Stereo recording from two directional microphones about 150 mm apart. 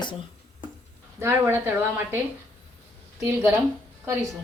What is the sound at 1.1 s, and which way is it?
Speech, 15° right (ahead or behind).